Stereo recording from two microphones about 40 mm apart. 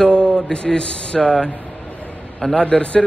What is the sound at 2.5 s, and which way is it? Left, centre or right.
Speech, left.